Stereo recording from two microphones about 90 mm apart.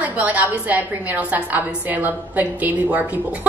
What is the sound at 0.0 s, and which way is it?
A woman's voice, 15° right (ahead or behind).